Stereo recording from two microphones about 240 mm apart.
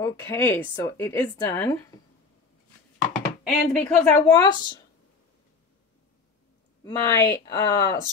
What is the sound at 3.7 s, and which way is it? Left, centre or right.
Speech, centre.